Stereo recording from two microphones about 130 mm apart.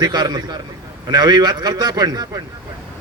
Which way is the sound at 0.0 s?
35° right (ahead or behind).